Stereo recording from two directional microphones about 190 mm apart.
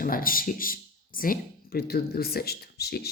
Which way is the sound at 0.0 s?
50° left (ahead or behind).